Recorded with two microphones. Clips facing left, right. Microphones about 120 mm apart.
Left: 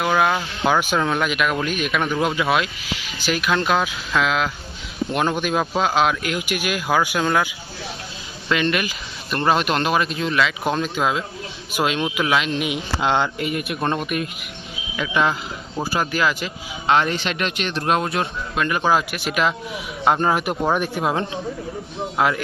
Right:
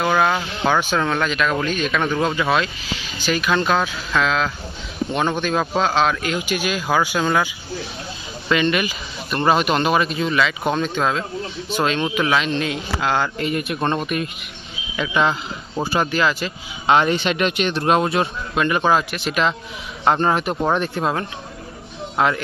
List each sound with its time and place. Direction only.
0.0 s a man's voice: 5° left (ahead or behind)
12.6 s speech: 20° left (ahead or behind)
13.4 s a man's voice: 5° left (ahead or behind)
16.8 s a man's voice: 5° right (ahead or behind)
22.2 s speech: 5° left (ahead or behind)